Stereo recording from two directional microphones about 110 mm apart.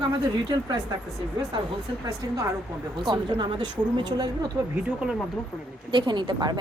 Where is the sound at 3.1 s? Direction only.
45° right (ahead or behind).